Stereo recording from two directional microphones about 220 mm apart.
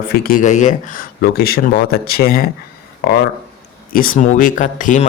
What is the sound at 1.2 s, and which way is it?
Speech, 45° left (ahead or behind).